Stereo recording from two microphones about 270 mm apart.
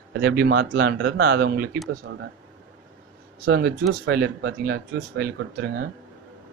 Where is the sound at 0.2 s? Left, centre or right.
Right.